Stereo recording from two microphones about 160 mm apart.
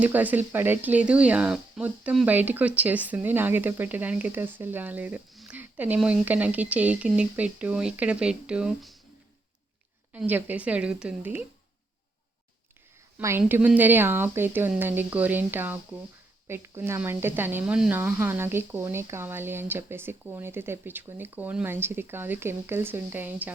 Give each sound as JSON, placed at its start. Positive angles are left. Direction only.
{"t": 0.0, "sound": "speech", "side_deg": -10}
{"t": 10.1, "sound": "speech", "side_deg": -10}
{"t": 13.1, "sound": "a woman's voice", "side_deg": -15}